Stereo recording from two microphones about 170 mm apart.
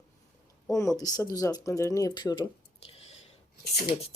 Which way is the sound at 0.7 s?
20° left (ahead or behind).